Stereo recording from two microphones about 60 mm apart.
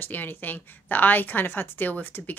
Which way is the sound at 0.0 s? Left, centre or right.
Left.